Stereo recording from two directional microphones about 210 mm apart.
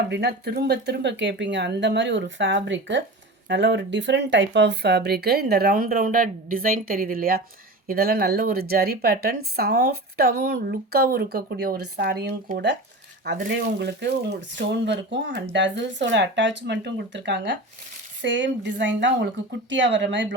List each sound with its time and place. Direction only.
0.1 s a woman's voice: 50° right (ahead or behind)